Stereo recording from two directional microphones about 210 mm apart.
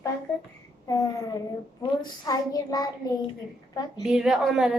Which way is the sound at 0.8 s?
15° left (ahead or behind).